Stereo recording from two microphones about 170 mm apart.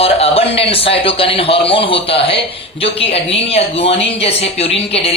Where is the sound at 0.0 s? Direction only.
35° left (ahead or behind).